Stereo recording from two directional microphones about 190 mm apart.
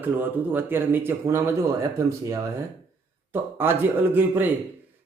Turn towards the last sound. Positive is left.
turn(degrees=-10)  # may be behind; listen again after turning